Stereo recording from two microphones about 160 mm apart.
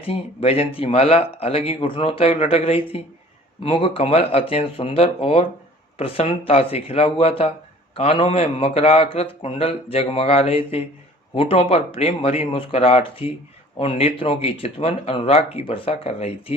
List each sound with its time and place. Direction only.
0.0 s speech: 35° left (ahead or behind)